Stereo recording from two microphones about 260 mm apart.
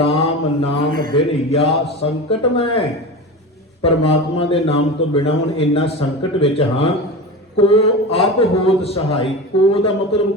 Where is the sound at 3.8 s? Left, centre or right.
Left.